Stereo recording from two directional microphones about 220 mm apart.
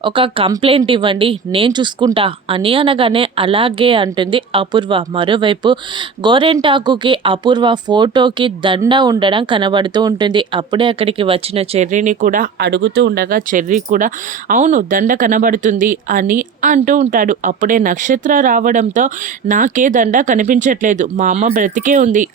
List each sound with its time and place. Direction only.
0.0 s speech: 25° right (ahead or behind)